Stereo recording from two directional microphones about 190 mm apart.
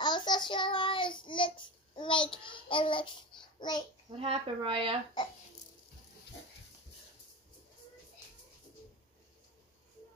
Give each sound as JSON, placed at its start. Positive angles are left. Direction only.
{"t": 0.0, "sound": "child singing", "side_deg": 25}
{"t": 2.7, "sound": "a child's voice", "side_deg": 25}
{"t": 4.2, "sound": "speech", "side_deg": -30}